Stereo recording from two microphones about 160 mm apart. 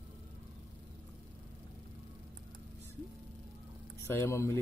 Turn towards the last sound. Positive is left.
turn(degrees=15)  # may be behind; listen again after turning